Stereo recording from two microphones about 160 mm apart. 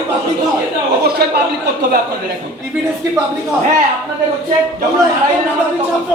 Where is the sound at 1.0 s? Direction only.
80° right.